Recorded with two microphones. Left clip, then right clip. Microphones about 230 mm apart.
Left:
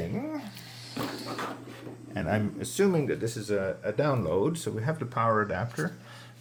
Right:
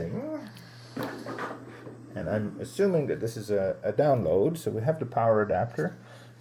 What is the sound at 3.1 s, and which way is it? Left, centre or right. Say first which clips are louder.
Speech: right 1 dB; centre.